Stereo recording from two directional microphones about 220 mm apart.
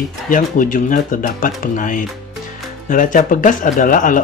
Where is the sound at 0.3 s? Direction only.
40° left (ahead or behind).